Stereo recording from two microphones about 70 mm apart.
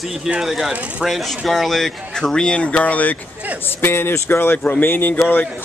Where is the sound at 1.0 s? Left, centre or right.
Centre; by 3.2 s left.